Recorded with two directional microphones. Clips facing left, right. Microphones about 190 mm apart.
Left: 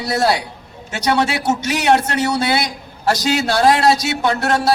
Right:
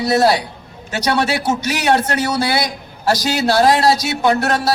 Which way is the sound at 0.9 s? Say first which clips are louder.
Even; 20° left (ahead or behind).